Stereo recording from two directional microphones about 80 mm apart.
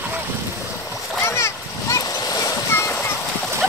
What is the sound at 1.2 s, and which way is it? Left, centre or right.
Splash, left.